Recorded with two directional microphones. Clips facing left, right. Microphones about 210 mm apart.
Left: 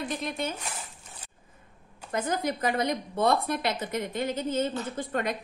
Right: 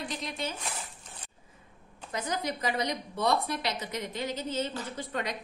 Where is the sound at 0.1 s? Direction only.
55° left (ahead or behind).